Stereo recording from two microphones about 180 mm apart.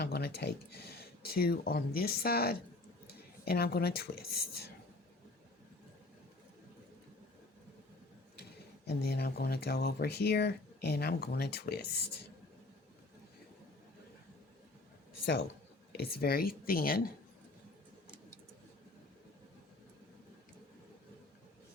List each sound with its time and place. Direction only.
0.0 s speech: 65° left (ahead or behind)
9.0 s speech: 60° left (ahead or behind)
15.9 s speech: 60° left (ahead or behind)